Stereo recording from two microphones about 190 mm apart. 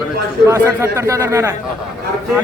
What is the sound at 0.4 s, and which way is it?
A man's voice, 15° right (ahead or behind).